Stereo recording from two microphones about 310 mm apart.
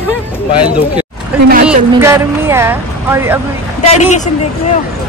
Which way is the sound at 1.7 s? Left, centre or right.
Centre.